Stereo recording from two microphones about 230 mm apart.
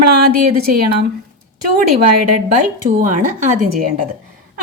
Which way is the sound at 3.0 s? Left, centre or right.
Right.